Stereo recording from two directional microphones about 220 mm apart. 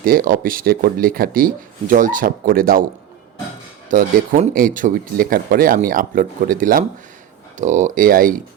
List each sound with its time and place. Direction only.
0.0 s speech: 40° right (ahead or behind)
3.8 s speech: 35° right (ahead or behind)